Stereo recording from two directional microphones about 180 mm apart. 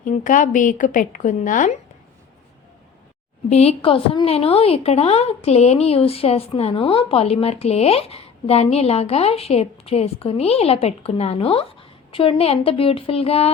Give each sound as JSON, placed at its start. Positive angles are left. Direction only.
{"t": 0.0, "sound": "a woman's voice", "side_deg": 45}
{"t": 3.5, "sound": "a woman's voice", "side_deg": 35}